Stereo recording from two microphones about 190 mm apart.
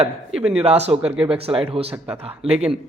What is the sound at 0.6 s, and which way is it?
Speech, 35° right (ahead or behind).